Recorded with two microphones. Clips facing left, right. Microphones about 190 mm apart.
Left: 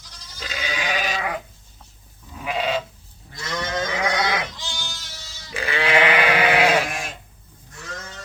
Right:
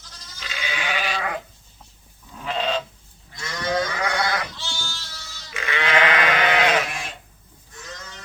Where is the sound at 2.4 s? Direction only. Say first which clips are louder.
Left 1 dB; 10° left (ahead or behind).